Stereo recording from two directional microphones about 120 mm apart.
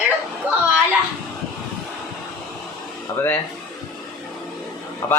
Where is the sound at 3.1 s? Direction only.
20° left (ahead or behind).